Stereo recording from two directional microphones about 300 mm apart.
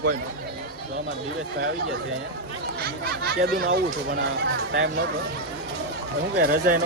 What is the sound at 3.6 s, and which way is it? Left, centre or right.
Speech, right.